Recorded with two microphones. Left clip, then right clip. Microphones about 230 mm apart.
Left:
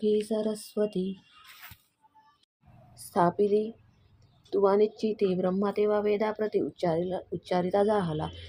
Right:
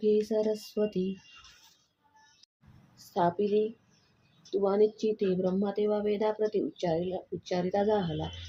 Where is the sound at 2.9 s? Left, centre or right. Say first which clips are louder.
Left 3 dB; left.